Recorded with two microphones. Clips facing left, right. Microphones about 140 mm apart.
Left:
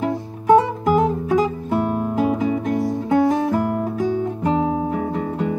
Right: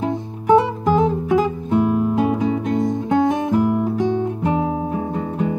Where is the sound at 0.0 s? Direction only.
20° right (ahead or behind).